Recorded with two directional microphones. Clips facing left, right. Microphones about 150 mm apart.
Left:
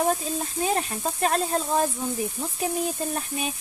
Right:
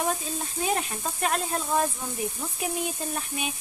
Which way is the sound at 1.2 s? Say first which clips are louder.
Left 4 dB; 35° left (ahead or behind).